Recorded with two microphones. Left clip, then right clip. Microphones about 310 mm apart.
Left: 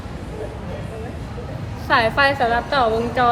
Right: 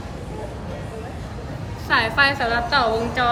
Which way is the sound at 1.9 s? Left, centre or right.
Centre.